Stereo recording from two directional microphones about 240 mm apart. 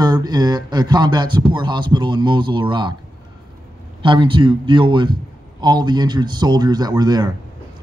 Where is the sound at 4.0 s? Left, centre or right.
Centre.